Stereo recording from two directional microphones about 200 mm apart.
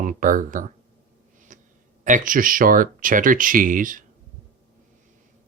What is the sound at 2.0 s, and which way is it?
Speech, 40° right (ahead or behind).